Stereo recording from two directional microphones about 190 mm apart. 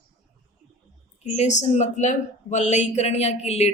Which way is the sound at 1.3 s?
35° left (ahead or behind).